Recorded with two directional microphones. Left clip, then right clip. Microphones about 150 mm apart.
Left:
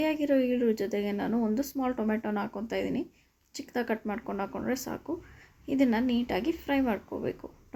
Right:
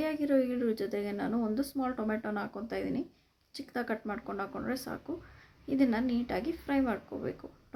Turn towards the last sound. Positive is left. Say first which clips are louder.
# left 4 dB
turn(degrees=25)  # may be behind; listen again after turning